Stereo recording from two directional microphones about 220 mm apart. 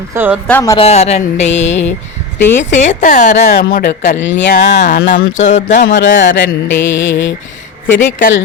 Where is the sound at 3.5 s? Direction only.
45° left (ahead or behind).